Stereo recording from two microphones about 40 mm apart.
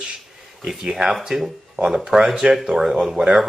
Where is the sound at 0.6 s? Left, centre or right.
Centre.